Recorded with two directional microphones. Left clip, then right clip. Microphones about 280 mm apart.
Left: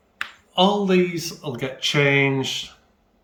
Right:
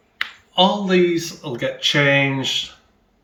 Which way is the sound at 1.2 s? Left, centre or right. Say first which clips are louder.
Right 4 dB; centre.